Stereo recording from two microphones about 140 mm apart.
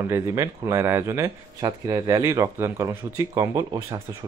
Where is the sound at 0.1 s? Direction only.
20° right (ahead or behind).